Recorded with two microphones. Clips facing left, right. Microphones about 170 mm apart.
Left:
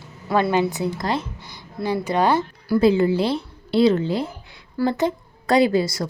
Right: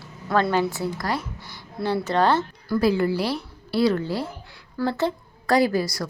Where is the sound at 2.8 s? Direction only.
20° left (ahead or behind).